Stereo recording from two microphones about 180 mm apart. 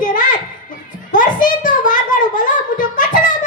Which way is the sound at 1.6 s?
45° left (ahead or behind).